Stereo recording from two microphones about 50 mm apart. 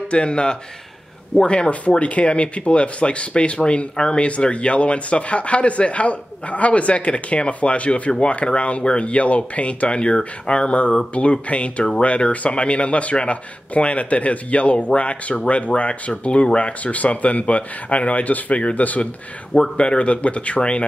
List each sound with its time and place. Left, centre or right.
0.1 s speech: centre
19.5 s speech: centre